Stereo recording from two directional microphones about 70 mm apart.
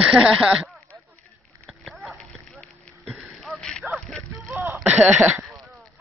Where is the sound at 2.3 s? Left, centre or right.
Centre.